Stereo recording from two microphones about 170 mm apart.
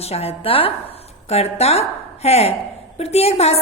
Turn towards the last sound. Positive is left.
turn(degrees=40)  # may be behind; listen again after turning